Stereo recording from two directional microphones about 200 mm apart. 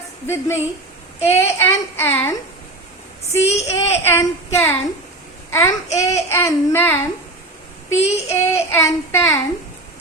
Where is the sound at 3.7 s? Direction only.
15° left (ahead or behind).